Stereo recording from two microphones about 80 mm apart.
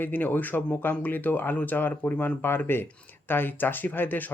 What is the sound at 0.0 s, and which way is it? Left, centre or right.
Speech, left.